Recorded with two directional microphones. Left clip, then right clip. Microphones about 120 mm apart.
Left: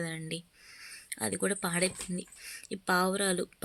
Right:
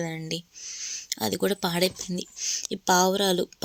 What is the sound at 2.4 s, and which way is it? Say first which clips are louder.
Speech: right 16 dB; 20° right (ahead or behind).